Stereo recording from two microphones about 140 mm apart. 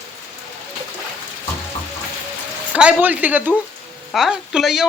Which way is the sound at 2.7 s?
10° right (ahead or behind).